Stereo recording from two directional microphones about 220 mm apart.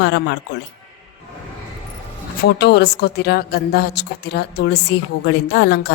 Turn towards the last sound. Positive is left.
turn(degrees=50)  # may be behind; listen again after turning